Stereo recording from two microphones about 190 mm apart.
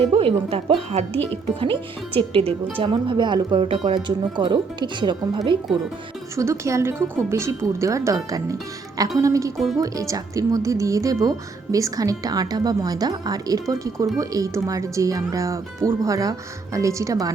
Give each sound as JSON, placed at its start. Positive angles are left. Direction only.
{"t": 0.1, "sound": "speech", "side_deg": -30}